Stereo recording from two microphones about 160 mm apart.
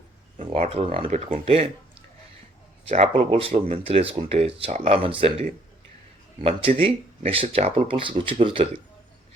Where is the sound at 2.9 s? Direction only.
45° right (ahead or behind).